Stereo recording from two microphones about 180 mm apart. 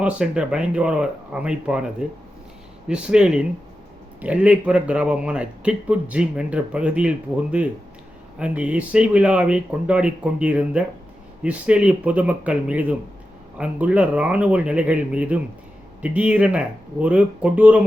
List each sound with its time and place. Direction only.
0.0 s speech: 5° right (ahead or behind)